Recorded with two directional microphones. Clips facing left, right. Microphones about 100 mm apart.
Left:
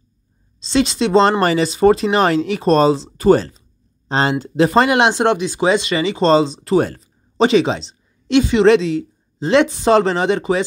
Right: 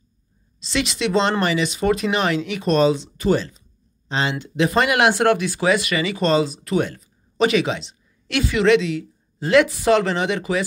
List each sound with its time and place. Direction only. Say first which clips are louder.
0.6 s speech: left 7 dB; 30° left (ahead or behind)